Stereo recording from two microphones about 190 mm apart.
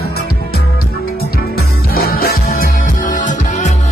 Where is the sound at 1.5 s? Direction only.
55° left (ahead or behind).